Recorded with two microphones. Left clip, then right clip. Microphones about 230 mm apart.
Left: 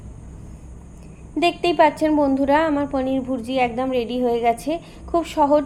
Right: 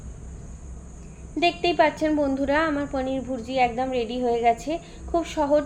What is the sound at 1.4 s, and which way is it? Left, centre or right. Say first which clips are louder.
A woman's voice: left 4 dB; left.